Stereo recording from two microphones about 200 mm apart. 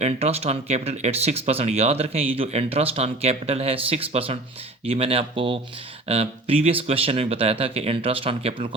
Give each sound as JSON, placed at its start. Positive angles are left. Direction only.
{"t": 0.0, "sound": "speech", "side_deg": -30}